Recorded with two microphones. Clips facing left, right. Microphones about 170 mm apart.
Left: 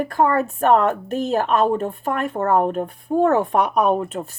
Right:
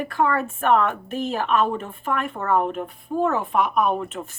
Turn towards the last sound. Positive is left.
turn(degrees=35)  # may be behind; listen again after turning